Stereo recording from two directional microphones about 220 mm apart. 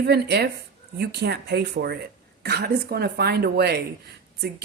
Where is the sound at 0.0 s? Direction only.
50° right (ahead or behind).